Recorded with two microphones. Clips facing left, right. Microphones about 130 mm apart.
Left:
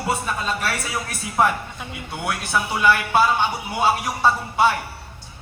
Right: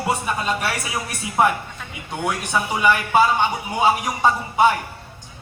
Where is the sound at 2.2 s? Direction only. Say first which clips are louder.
Right 1 dB; 15° right (ahead or behind).